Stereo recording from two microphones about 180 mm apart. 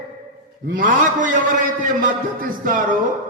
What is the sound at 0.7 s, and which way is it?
A man's voice, 50° right (ahead or behind).